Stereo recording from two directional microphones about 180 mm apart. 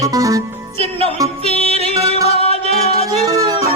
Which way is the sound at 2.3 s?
35° left (ahead or behind).